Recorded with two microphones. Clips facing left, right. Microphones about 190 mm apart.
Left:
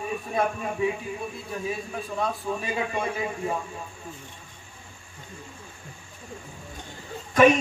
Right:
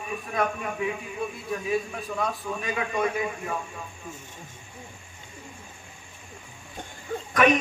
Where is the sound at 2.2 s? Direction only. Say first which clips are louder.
Left 2 dB; 25° left (ahead or behind).